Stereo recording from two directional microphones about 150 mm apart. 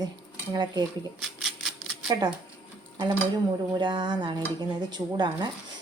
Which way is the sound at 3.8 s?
30° right (ahead or behind).